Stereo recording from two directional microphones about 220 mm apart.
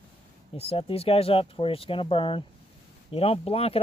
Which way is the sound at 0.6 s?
25° left (ahead or behind).